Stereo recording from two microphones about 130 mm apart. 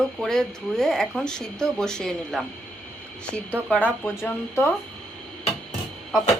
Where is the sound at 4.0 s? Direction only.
15° left (ahead or behind).